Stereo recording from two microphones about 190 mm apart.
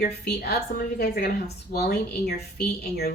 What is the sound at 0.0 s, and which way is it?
A woman's voice, 60° left (ahead or behind).